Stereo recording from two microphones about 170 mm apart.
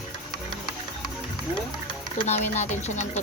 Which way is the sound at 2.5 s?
40° left (ahead or behind).